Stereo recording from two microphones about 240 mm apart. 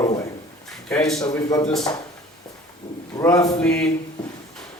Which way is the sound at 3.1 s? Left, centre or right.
Centre.